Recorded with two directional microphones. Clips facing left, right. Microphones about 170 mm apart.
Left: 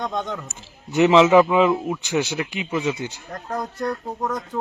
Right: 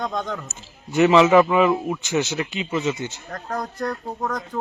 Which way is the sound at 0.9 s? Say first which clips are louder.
Left 1 dB; 15° left (ahead or behind).